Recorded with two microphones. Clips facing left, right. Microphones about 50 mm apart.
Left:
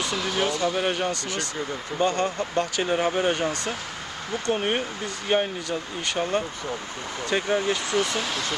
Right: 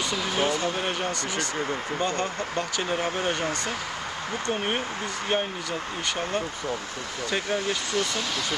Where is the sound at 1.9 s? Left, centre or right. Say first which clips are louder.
Left 6 dB; centre.